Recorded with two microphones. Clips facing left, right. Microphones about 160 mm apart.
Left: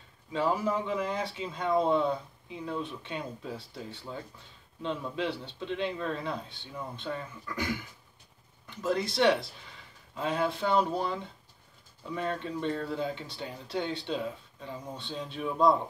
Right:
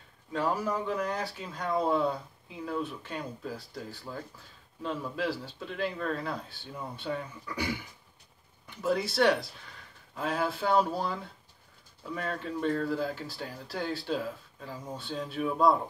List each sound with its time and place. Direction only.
0.3 s speech: centre (ahead or behind)